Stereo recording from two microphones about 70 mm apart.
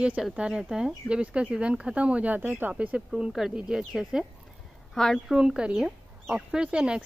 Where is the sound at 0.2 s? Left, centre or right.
Centre.